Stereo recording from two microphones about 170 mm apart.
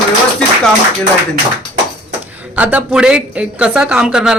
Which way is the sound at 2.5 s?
10° right (ahead or behind).